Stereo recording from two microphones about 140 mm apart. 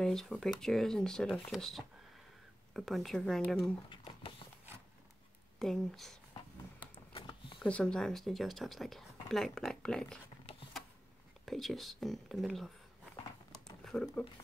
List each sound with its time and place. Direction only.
0.0 s speech: 5° left (ahead or behind)
3.9 s a sound: 40° left (ahead or behind)
5.6 s speech: 5° left (ahead or behind)
7.1 s a sound: 40° left (ahead or behind)
7.5 s speech: 10° left (ahead or behind)
11.4 s speech: centre (ahead or behind)
13.8 s speech: 5° left (ahead or behind)